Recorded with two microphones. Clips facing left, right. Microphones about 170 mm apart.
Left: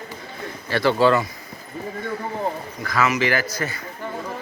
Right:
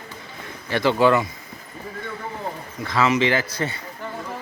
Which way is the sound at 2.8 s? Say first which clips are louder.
Right 2 dB; 25° right (ahead or behind).